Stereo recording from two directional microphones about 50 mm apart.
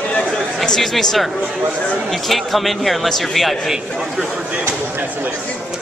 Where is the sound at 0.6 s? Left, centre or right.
Centre.